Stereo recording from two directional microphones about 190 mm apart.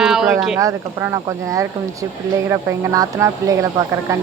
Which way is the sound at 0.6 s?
15° right (ahead or behind).